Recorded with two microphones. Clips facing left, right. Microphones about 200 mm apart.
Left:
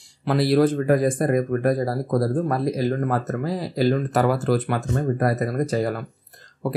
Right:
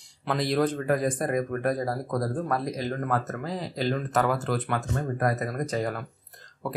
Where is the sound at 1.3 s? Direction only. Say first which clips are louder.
Left 6 dB; 35° left (ahead or behind).